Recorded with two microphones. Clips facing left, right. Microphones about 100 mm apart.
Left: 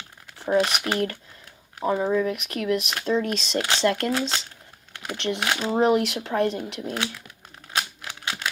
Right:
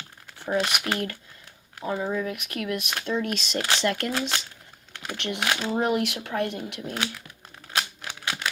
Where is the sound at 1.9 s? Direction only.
20° left (ahead or behind).